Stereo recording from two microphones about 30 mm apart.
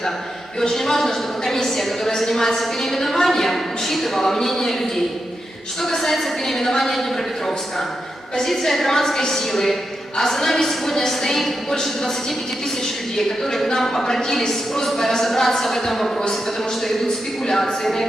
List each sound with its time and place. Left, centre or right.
0.7 s a woman's voice: centre
8.4 s a woman's voice: centre
13.1 s a woman's voice: centre
17.5 s a woman's voice: centre